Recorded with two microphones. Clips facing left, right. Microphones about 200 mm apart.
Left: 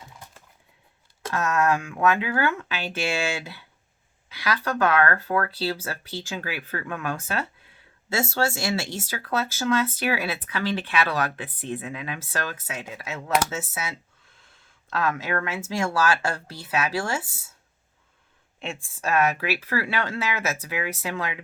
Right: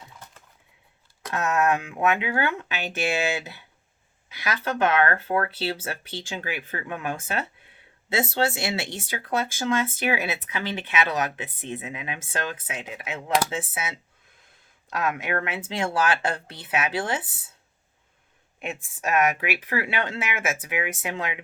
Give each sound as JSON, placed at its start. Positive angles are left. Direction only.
{"t": 1.3, "sound": "speech", "side_deg": -20}
{"t": 19.0, "sound": "speech", "side_deg": -20}